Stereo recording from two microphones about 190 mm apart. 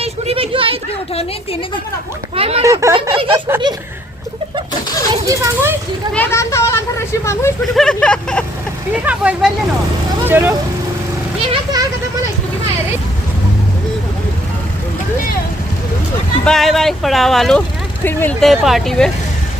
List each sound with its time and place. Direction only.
0.0 s a sound: 30° right (ahead or behind)
2.3 s speech: 30° right (ahead or behind)
2.6 s speech: 15° right (ahead or behind)
5.2 s speech: 15° right (ahead or behind)
6.1 s speech: 15° left (ahead or behind)
7.6 s speech: centre (ahead or behind)
8.9 s speech: 5° right (ahead or behind)
11.4 s speech: 25° right (ahead or behind)
16.4 s speech: centre (ahead or behind)